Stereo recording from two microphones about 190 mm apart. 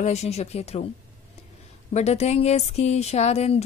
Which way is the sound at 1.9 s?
35° left (ahead or behind).